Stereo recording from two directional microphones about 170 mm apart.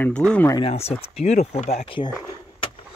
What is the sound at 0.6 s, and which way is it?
Speech, 35° left (ahead or behind).